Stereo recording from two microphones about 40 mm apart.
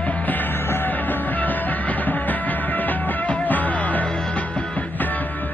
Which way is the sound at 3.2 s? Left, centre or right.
Left.